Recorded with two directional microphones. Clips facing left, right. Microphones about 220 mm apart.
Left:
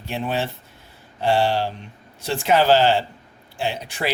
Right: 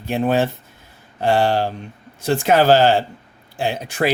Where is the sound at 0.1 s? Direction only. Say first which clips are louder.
Right 7 dB; 45° right (ahead or behind).